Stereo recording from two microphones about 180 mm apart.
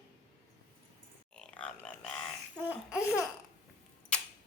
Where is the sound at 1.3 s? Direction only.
5° left (ahead or behind).